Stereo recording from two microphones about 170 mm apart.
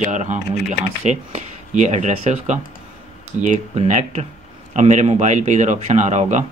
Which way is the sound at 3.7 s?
40° right (ahead or behind).